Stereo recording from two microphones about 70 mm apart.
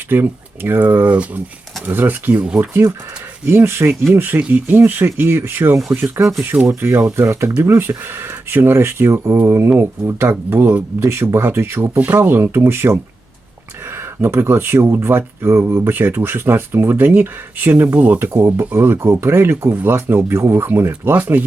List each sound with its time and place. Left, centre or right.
0.1 s speech: right
3.4 s speech: right
11.9 s speech: right
18.2 s speech: right